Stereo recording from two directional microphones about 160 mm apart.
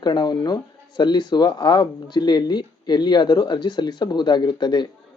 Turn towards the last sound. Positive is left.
turn(degrees=25)  # may be behind; listen again after turning